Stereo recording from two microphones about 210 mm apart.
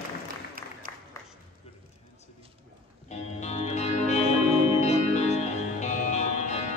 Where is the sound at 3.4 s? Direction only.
30° left (ahead or behind).